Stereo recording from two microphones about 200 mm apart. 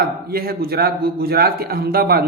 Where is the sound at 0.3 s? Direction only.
50° right (ahead or behind).